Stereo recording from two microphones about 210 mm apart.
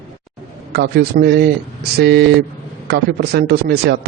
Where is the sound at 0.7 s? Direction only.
55° right (ahead or behind).